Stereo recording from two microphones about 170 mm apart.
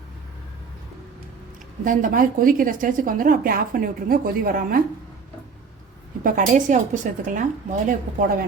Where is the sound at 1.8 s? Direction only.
50° right (ahead or behind).